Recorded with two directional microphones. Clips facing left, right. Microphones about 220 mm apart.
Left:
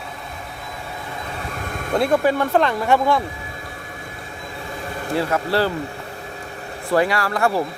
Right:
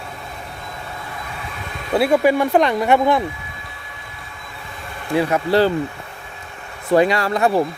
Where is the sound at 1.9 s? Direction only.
10° right (ahead or behind).